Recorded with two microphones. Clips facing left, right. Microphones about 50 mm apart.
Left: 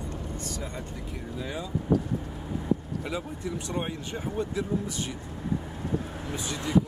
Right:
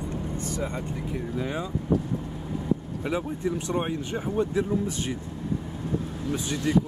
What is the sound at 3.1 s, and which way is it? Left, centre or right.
Speech, right.